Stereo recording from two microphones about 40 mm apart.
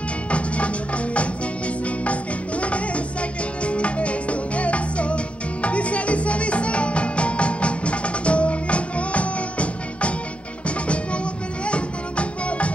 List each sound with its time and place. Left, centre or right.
0.3 s music: left
11.6 s music: left